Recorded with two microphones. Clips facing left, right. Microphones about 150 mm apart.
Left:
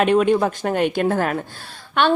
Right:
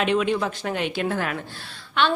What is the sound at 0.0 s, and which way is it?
A woman's voice, 50° left (ahead or behind).